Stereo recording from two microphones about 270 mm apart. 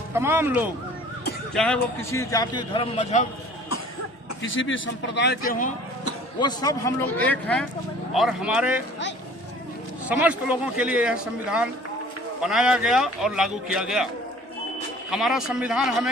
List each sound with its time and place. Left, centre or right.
0.1 s speech: centre
1.5 s a man's voice: centre; by 3.2 s left
4.4 s a man's voice: left
6.4 s a man's voice: centre
10.1 s a man's voice: centre
15.1 s a man's voice: centre